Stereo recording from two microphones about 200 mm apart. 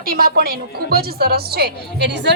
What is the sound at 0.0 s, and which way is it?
A woman's voice, 45° right (ahead or behind).